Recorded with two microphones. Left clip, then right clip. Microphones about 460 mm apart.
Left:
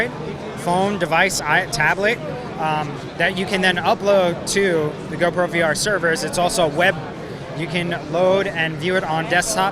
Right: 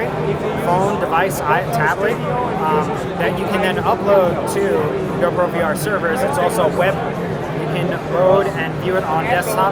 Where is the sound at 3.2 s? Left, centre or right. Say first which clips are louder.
Left 1 dB; left.